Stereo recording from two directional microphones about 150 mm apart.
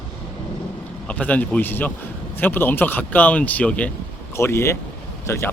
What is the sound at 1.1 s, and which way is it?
Speech, 10° left (ahead or behind).